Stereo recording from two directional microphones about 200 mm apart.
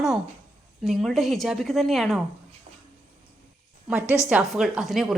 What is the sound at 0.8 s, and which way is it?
A woman's voice, centre (ahead or behind).